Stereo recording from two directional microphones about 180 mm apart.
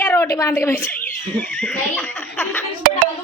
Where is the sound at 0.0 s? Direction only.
15° left (ahead or behind).